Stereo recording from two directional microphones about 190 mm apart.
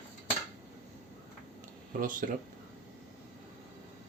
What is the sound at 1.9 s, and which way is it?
Speech, 45° right (ahead or behind).